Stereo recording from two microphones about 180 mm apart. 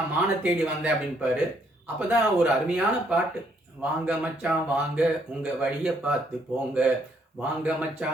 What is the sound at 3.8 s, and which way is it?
Speech, 5° right (ahead or behind).